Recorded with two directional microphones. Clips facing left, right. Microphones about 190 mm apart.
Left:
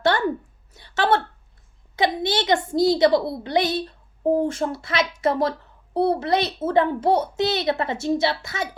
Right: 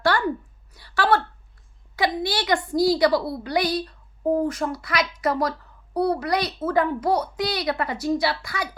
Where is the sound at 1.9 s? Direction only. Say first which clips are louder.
Left 2 dB; 20° left (ahead or behind).